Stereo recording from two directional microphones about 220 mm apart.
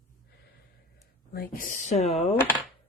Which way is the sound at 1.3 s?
45° left (ahead or behind).